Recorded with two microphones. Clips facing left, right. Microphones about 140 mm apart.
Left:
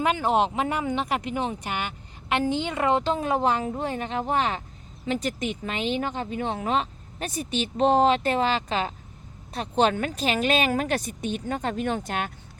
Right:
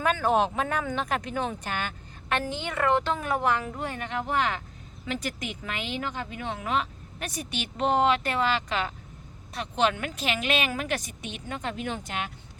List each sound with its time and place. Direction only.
0.0 s a woman's voice: 15° left (ahead or behind); by 12.3 s 45° left (ahead or behind)